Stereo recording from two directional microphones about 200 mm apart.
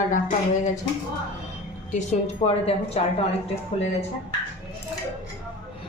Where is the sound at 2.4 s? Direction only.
30° left (ahead or behind).